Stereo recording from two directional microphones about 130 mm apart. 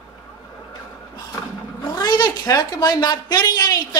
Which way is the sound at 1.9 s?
35° left (ahead or behind).